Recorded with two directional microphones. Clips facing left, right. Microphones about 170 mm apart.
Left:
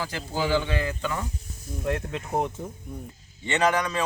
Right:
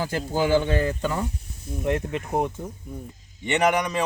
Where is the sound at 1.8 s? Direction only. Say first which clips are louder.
Right 3 dB; 20° right (ahead or behind).